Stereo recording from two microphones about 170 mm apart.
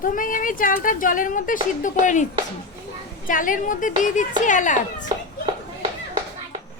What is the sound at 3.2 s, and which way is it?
A woman's voice, 50° left (ahead or behind).